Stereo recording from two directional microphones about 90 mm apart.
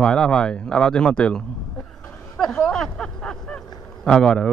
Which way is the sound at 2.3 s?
5° left (ahead or behind).